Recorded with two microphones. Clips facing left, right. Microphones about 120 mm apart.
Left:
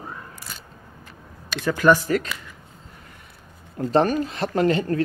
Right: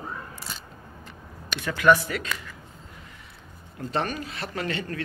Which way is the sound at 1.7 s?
40° left (ahead or behind).